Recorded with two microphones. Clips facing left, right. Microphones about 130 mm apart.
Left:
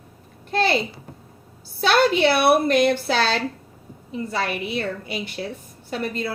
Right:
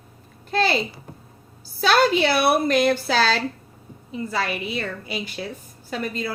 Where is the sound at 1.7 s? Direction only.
55° left (ahead or behind).